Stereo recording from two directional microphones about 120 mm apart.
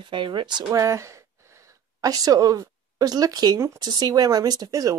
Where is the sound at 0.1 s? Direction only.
40° right (ahead or behind).